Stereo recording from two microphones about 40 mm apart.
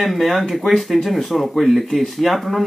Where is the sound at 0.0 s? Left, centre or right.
Centre.